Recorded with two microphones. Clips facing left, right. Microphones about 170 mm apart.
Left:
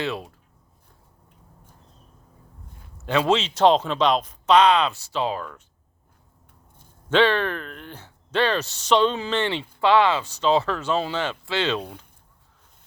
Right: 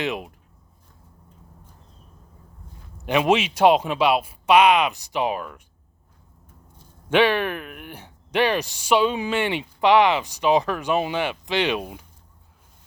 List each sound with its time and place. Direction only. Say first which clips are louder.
0.0 s speech: right 1 dB; 15° right (ahead or behind)
3.0 s speech: right 1 dB; 15° right (ahead or behind)
7.1 s speech: even; 10° right (ahead or behind)